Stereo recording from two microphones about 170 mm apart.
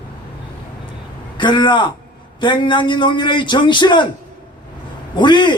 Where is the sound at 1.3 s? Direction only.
25° left (ahead or behind).